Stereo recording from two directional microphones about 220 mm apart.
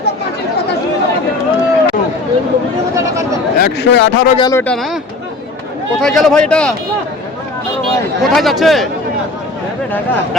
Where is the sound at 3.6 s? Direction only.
50° left (ahead or behind).